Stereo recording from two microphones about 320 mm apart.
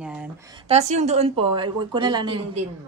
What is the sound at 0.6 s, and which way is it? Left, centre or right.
A woman's voice, right.